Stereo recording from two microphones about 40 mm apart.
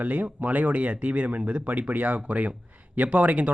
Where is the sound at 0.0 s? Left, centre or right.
Right.